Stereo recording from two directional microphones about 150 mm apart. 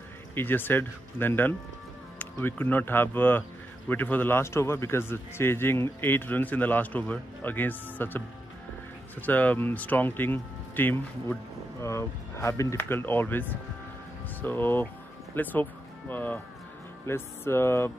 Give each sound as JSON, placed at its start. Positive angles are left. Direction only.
{"t": 0.3, "sound": "a man's voice", "side_deg": 15}
{"t": 9.2, "sound": "a man's voice", "side_deg": 10}